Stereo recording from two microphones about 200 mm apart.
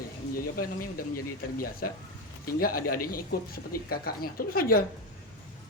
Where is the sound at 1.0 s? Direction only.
45° left (ahead or behind).